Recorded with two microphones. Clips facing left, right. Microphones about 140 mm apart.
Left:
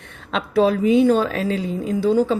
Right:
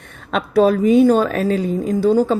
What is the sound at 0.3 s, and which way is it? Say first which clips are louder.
A woman's voice: right 3 dB; 50° right (ahead or behind).